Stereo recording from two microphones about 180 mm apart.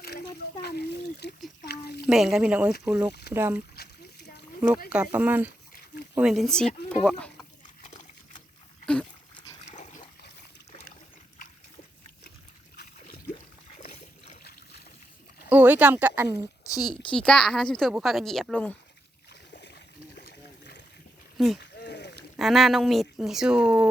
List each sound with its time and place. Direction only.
0.6 s speech: 65° left (ahead or behind)
2.0 s speech: 5° right (ahead or behind)
2.9 s speech: 15° right (ahead or behind)
3.8 s rowboat: 65° left (ahead or behind)
5.1 s speech: 10° right (ahead or behind)
9.6 s dog: 45° left (ahead or behind)
15.4 s speech: 10° right (ahead or behind)
16.6 s speech: 20° left (ahead or behind)
17.1 s speech: 5° left (ahead or behind)
19.3 s boat: 65° left (ahead or behind)
21.3 s speech: centre (ahead or behind)
21.8 s a sound: 70° left (ahead or behind)
22.4 s speech: centre (ahead or behind)